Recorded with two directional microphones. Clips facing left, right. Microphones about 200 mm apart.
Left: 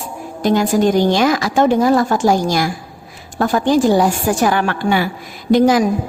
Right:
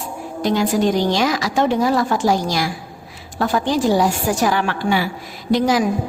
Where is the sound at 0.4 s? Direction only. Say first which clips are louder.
Left 3 dB; 50° left (ahead or behind).